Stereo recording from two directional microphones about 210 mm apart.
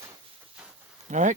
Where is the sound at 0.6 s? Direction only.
5° right (ahead or behind).